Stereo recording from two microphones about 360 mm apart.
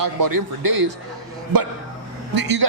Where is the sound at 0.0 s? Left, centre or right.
Right.